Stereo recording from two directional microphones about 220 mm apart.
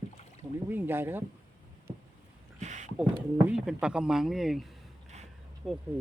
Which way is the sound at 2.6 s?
35° right (ahead or behind).